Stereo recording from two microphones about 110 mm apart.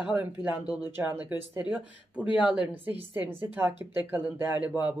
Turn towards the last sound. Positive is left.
turn(degrees=-15)  # may be behind; listen again after turning